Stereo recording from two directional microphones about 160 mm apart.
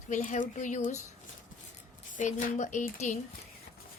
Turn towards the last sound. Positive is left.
turn(degrees=50)  # may be behind; listen again after turning